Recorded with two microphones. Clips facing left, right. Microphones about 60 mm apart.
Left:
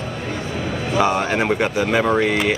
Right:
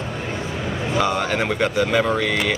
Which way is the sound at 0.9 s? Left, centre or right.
Left.